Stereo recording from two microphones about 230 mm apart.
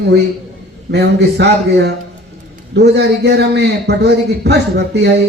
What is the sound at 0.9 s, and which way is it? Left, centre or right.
Speech, right.